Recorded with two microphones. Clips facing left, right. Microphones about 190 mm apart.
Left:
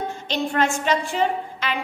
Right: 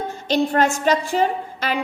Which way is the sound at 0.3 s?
40° right (ahead or behind).